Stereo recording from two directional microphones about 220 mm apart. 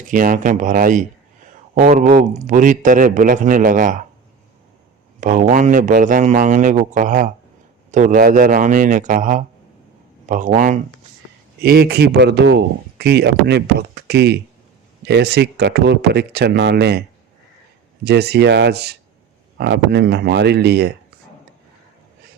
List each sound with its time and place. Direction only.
0.1 s a man's voice: 40° right (ahead or behind)
5.2 s a man's voice: 35° right (ahead or behind)
11.6 s speech: 45° right (ahead or behind)
18.0 s speech: 45° right (ahead or behind)